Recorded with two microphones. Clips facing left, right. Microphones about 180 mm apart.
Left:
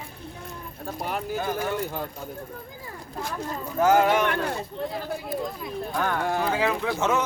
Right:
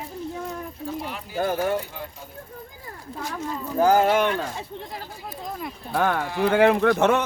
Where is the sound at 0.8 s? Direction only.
50° left (ahead or behind).